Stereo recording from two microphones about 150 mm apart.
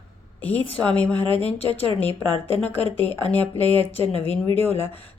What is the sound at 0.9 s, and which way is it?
Speech, 10° left (ahead or behind).